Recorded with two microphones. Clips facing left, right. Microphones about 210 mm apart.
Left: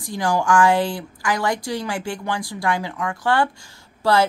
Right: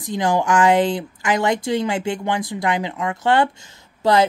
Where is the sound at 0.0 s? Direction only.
20° right (ahead or behind).